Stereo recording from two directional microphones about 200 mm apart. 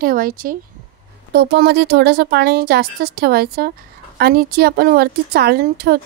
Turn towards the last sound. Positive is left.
turn(degrees=-50)  # may be behind; listen again after turning